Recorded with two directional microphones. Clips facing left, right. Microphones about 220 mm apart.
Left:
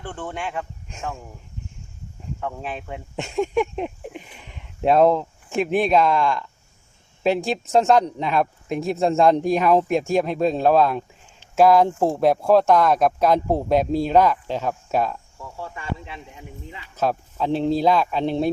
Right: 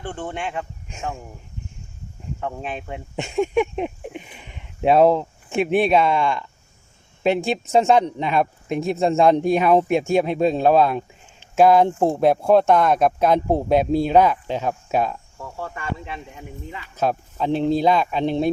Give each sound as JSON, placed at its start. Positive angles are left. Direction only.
{"t": 0.0, "sound": "speech", "side_deg": -25}
{"t": 0.5, "sound": "speech", "side_deg": -5}
{"t": 2.6, "sound": "speech", "side_deg": -5}
{"t": 15.4, "sound": "speech", "side_deg": -60}
{"t": 17.0, "sound": "speech", "side_deg": 0}